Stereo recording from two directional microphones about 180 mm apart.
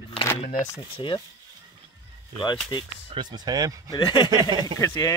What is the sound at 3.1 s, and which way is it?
Speech, 25° right (ahead or behind).